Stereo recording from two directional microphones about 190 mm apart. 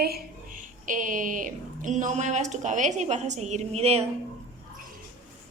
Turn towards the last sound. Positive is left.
turn(degrees=-35)  # may be behind; listen again after turning